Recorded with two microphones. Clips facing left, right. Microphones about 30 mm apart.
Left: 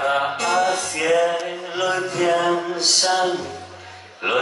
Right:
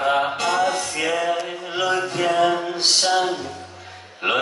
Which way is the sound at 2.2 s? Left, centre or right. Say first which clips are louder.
Even; centre.